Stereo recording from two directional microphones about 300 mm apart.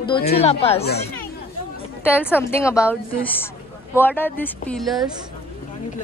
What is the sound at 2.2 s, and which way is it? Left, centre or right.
Speech, centre.